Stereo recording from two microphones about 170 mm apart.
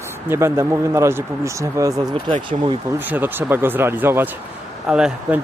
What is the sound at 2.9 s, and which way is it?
Speech, 10° right (ahead or behind).